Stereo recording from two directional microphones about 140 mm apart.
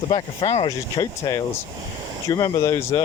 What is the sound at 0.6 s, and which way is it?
Speech, 25° left (ahead or behind).